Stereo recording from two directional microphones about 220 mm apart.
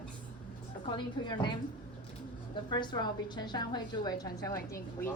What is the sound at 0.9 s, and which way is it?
Speech, 20° left (ahead or behind).